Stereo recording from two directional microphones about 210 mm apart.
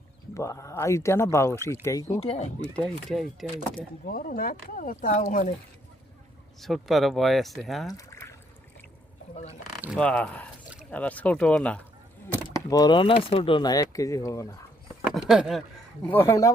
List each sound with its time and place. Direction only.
0.3 s speech: 15° left (ahead or behind)
2.2 s speech: 30° left (ahead or behind)
2.7 s speech: 5° left (ahead or behind)
4.0 s speech: 40° left (ahead or behind)
6.6 s speech: centre (ahead or behind)
7.9 s a sound: 15° left (ahead or behind)
9.3 s speech: 30° left (ahead or behind)
10.0 s speech: 5° left (ahead or behind)
12.5 s speech: 20° left (ahead or behind)
15.1 s speech: 5° right (ahead or behind)
16.0 s speech: 10° left (ahead or behind)